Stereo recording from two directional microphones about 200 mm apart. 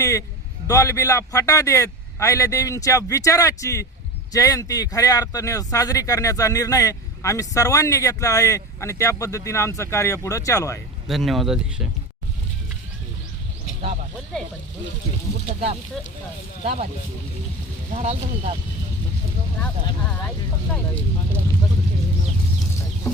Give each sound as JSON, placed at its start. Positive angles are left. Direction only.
{"t": 0.0, "sound": "a sound", "side_deg": 15}
{"t": 0.7, "sound": "speech", "side_deg": 15}
{"t": 11.1, "sound": "speech", "side_deg": 0}
{"t": 17.9, "sound": "speech", "side_deg": -30}